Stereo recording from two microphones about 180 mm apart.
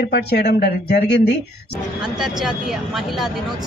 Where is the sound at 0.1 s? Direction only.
60° left (ahead or behind).